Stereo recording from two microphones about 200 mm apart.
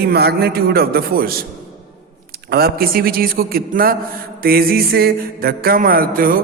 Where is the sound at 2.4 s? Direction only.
50° right (ahead or behind).